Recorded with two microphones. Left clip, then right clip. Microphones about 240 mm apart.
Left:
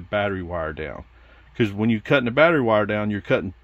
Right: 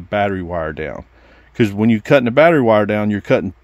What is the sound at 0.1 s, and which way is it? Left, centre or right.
Speech, right.